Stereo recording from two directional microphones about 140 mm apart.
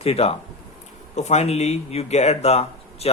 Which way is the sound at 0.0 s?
45° left (ahead or behind).